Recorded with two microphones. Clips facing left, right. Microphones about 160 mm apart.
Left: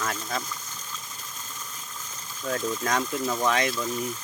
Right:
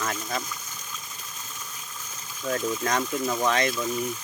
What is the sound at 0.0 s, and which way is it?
Speech, 10° right (ahead or behind).